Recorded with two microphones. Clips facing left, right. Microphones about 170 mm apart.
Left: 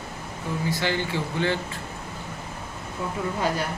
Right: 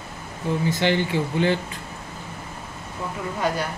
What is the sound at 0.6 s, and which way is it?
Speech, 20° right (ahead or behind).